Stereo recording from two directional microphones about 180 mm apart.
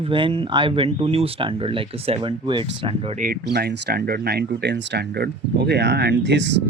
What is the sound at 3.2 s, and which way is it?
Speech, 60° right (ahead or behind).